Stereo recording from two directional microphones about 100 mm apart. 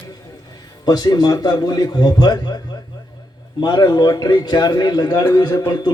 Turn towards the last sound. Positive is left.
turn(degrees=45)  # may be behind; listen again after turning